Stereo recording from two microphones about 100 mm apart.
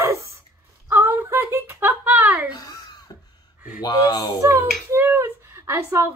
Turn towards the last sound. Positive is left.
turn(degrees=-30)  # may be behind; listen again after turning